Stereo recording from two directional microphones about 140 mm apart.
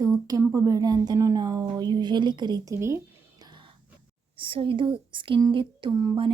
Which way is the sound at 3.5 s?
35° right (ahead or behind).